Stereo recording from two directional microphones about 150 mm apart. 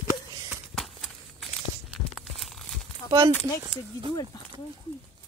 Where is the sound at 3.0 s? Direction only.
15° left (ahead or behind).